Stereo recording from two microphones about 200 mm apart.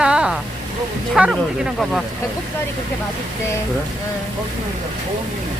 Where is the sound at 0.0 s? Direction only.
5° right (ahead or behind).